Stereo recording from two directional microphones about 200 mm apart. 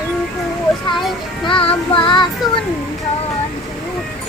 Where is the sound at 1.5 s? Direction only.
25° left (ahead or behind).